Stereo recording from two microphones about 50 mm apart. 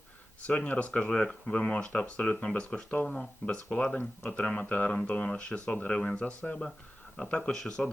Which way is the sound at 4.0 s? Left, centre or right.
Left.